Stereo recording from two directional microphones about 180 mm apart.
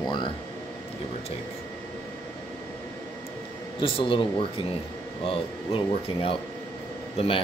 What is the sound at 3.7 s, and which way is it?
Speech, 30° left (ahead or behind).